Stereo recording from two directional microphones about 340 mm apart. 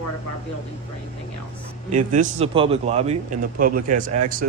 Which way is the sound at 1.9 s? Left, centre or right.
Right.